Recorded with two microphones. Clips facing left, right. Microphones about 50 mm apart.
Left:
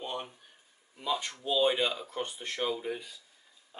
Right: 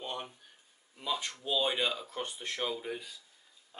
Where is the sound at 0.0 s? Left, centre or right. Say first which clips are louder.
Left 2 dB; centre.